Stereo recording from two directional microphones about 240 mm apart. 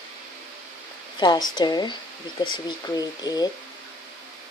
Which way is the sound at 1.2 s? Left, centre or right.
Centre.